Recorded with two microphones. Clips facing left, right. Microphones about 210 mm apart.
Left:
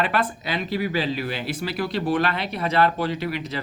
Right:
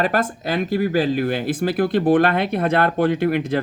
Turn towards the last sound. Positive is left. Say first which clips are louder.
# right 9 dB
turn(degrees=-55)  # may be behind; listen again after turning